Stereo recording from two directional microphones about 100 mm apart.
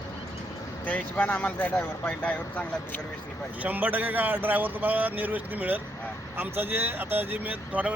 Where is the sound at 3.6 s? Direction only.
15° right (ahead or behind).